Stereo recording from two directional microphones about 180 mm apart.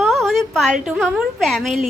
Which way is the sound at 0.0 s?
Centre (ahead or behind).